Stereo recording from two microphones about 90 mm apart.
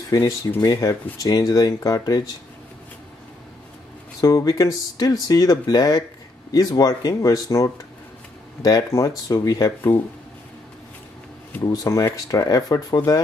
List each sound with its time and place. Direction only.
0.6 s speech: 40° left (ahead or behind)
4.2 s speech: 40° left (ahead or behind)
11.6 s speech: 40° left (ahead or behind)